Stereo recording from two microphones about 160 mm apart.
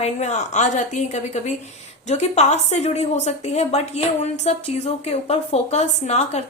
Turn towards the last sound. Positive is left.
turn(degrees=45)  # may be behind; listen again after turning